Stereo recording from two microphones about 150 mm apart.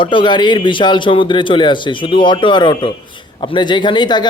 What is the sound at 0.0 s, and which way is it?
A man's voice, 35° left (ahead or behind).